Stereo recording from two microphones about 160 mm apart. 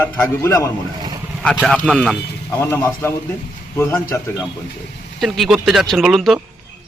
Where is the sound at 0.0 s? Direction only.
15° left (ahead or behind).